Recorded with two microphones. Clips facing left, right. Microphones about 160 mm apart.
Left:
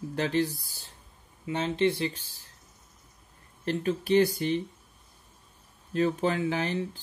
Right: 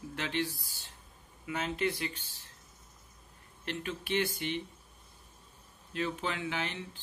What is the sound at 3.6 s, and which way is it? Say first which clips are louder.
Speech: left 10 dB; 35° left (ahead or behind).